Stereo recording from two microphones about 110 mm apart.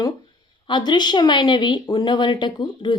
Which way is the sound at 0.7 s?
40° left (ahead or behind).